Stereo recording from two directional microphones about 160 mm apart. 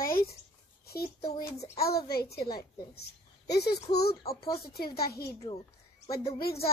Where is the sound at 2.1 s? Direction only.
75° left (ahead or behind).